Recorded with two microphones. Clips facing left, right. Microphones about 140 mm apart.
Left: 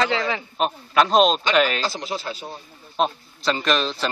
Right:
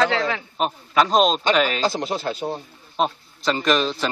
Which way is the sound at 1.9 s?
50° right (ahead or behind).